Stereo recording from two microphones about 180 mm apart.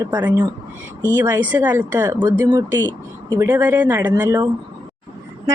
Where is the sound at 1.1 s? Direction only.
10° right (ahead or behind).